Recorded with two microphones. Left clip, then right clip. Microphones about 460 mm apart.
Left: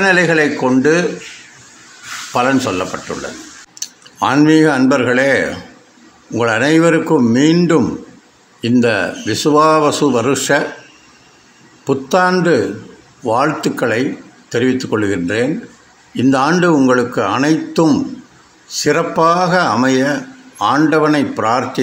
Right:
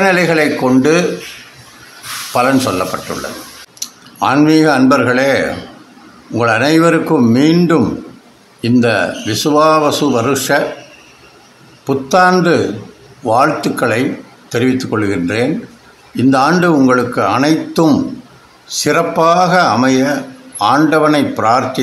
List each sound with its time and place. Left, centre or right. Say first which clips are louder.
0.0 s a man's voice: right 1 dB; right
2.3 s a man's voice: right 2 dB; right
11.8 s a man's voice: right 3 dB; right